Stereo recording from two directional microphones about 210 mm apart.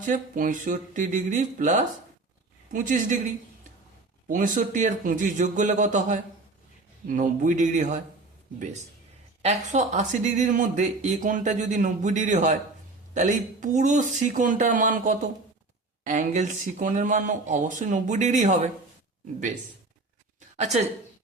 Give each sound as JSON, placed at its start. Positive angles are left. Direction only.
{"t": 0.0, "sound": "speech", "side_deg": -40}
{"t": 4.3, "sound": "speech", "side_deg": -40}
{"t": 20.6, "sound": "a woman's voice", "side_deg": -35}